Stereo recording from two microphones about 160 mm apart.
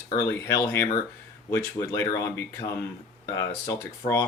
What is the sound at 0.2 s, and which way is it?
Speech, 20° left (ahead or behind).